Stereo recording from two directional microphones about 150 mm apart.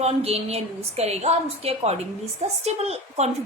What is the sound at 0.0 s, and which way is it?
A woman's voice, 45° right (ahead or behind).